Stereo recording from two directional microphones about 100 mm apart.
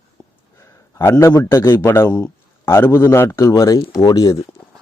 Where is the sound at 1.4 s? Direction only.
30° left (ahead or behind).